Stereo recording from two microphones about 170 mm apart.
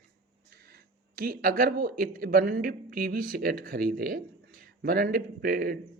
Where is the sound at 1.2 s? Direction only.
55° right (ahead or behind).